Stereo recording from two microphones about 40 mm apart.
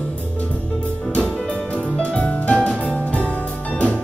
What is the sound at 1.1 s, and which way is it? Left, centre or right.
Music, left.